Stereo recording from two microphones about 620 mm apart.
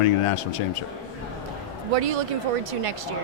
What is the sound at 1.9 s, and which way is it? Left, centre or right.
Speech, right.